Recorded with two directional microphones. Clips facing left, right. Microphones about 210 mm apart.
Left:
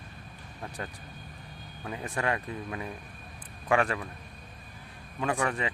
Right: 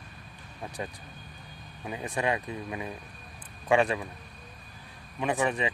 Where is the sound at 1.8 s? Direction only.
15° right (ahead or behind).